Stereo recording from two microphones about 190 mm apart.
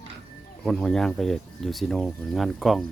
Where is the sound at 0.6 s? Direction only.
5° left (ahead or behind).